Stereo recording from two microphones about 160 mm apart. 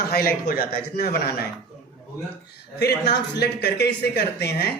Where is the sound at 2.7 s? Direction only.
90° left.